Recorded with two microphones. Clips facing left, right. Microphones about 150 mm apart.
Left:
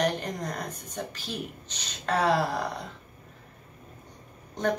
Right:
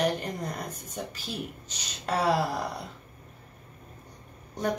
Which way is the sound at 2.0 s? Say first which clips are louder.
Left 1 dB; 10° right (ahead or behind).